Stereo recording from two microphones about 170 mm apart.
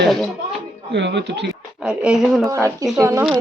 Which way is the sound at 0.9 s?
90° right.